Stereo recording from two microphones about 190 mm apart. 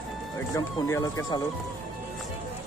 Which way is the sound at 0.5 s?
15° left (ahead or behind).